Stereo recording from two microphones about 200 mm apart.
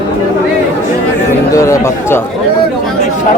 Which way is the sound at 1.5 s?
15° left (ahead or behind).